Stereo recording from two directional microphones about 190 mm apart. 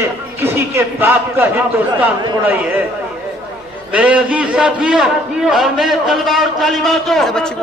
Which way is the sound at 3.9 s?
5° right (ahead or behind).